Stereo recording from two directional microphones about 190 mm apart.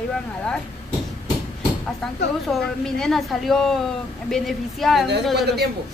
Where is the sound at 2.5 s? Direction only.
5° left (ahead or behind).